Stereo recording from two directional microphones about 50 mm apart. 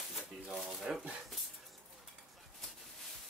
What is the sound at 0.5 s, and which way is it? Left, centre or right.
Speech, centre.